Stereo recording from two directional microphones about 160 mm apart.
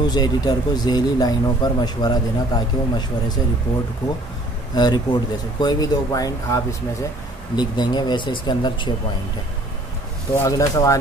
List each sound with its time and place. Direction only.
0.0 s speech: 25° left (ahead or behind)
4.7 s speech: 25° left (ahead or behind)
10.3 s speech: 20° left (ahead or behind)